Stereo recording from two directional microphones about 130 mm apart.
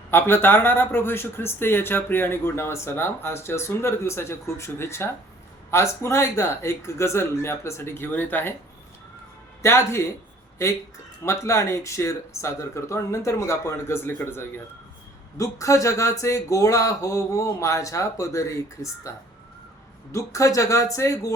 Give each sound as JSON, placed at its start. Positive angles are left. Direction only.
{"t": 0.1, "sound": "speech", "side_deg": 15}
{"t": 9.6, "sound": "speech", "side_deg": 20}
{"t": 11.2, "sound": "speech", "side_deg": 20}
{"t": 20.1, "sound": "speech", "side_deg": 25}